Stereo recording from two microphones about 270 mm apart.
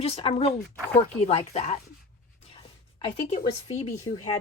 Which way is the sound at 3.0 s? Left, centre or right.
Left.